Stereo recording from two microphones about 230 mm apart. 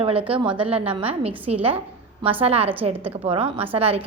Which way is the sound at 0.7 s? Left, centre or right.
Right.